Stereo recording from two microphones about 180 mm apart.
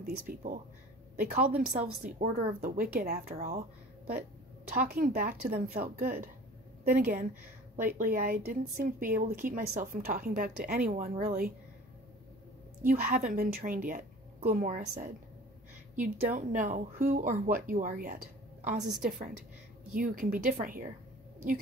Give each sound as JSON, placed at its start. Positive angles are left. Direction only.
{"t": 0.3, "sound": "speech", "side_deg": -55}
{"t": 4.6, "sound": "a woman's voice", "side_deg": -60}
{"t": 12.8, "sound": "speech", "side_deg": -55}